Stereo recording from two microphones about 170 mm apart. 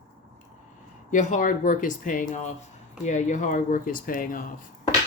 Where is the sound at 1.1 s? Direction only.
50° left (ahead or behind).